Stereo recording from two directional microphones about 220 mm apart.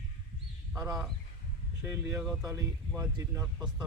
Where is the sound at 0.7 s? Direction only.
15° right (ahead or behind).